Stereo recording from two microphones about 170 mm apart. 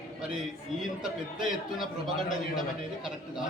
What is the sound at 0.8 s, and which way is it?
Speech, centre (ahead or behind).